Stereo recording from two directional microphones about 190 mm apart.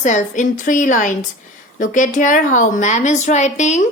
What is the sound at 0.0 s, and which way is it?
A woman's voice, 40° left (ahead or behind).